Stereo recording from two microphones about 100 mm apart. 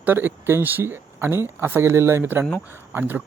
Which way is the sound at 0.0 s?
20° right (ahead or behind).